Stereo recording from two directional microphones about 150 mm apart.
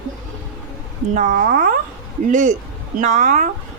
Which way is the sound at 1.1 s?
70° right (ahead or behind).